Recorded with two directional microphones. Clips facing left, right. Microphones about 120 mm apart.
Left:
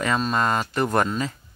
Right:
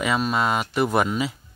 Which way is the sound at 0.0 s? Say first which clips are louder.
Even; 10° right (ahead or behind).